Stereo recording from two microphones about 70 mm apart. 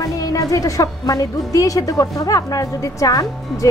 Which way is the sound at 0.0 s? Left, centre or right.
Left.